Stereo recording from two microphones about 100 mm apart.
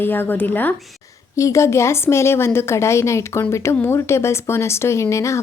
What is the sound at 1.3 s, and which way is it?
Speech, 30° left (ahead or behind).